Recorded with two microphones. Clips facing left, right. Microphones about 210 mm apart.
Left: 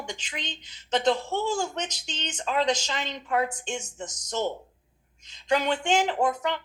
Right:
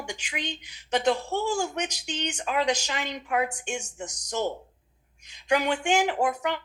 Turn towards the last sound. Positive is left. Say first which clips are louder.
# even
turn(degrees=-10)  # may be behind; listen again after turning